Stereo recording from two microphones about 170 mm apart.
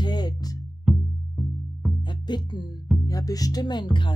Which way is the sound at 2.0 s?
25° left (ahead or behind).